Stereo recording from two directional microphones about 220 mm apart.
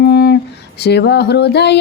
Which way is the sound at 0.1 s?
50° left (ahead or behind).